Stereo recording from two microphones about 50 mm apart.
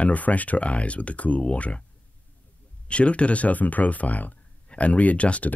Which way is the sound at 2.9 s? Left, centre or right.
Left.